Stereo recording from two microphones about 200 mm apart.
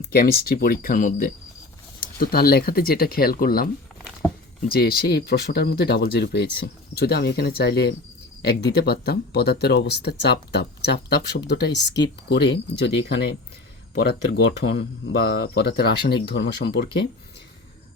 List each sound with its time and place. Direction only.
0.0 s speech: 50° left (ahead or behind)
4.7 s speech: 50° left (ahead or behind)